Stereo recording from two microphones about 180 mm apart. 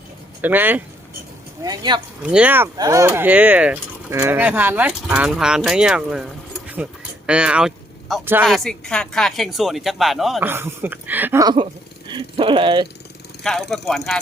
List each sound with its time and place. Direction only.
0.4 s speech: 10° right (ahead or behind)
1.6 s speech: 20° right (ahead or behind)
2.2 s speech: 5° right (ahead or behind)
2.7 s speech: 20° right (ahead or behind); by 8.2 s centre (ahead or behind)
8.2 s speech: 10° right (ahead or behind)
8.4 s speech: centre (ahead or behind)
10.4 s speech: 10° right (ahead or behind)
11.4 s speech: 25° right (ahead or behind)
13.4 s speech: centre (ahead or behind)